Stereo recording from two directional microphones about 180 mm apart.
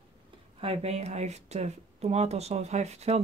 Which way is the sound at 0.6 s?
35° right (ahead or behind).